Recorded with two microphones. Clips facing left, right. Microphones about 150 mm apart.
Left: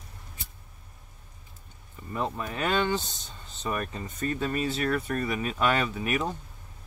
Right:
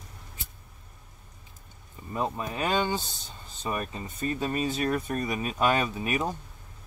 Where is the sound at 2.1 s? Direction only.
15° right (ahead or behind).